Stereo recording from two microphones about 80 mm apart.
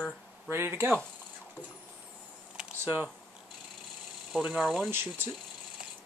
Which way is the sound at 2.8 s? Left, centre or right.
Centre.